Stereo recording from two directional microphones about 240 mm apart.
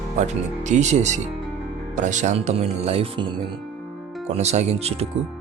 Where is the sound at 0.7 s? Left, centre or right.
Right.